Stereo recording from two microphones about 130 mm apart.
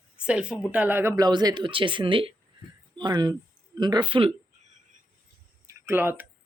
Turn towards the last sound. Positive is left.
turn(degrees=-15)  # may be behind; listen again after turning